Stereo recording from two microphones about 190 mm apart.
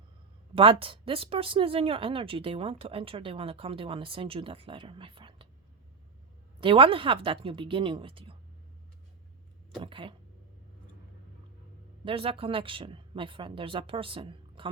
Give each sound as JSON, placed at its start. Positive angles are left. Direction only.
{"t": 0.5, "sound": "speech", "side_deg": -30}
{"t": 6.6, "sound": "speech", "side_deg": -30}
{"t": 9.8, "sound": "speech", "side_deg": -25}
{"t": 12.0, "sound": "speech", "side_deg": -30}